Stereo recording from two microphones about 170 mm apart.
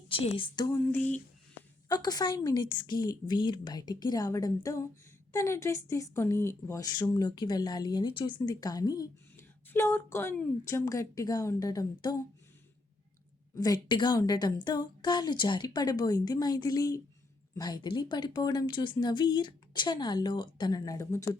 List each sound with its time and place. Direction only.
0.1 s a woman's voice: 30° left (ahead or behind)
0.9 s a woman's voice: 10° left (ahead or behind)
1.9 s a woman's voice: 25° left (ahead or behind)
13.6 s a woman's voice: 25° left (ahead or behind)